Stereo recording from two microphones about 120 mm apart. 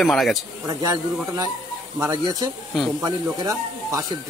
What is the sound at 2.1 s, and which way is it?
Speech, 35° right (ahead or behind).